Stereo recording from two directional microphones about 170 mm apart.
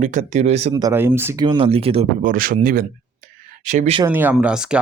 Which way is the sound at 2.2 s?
55° right (ahead or behind).